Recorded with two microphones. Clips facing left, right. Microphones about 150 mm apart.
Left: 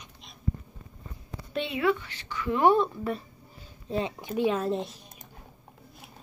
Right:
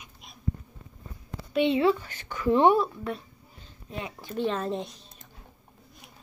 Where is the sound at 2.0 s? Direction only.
50° right (ahead or behind).